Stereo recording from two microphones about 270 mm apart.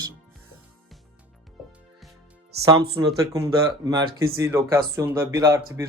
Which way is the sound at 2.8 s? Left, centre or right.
Centre.